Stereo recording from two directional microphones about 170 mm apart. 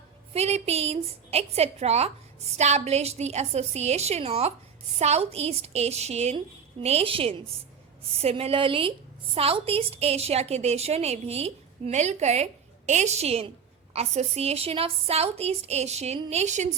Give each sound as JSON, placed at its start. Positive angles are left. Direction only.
{"t": 0.3, "sound": "a woman's voice", "side_deg": -40}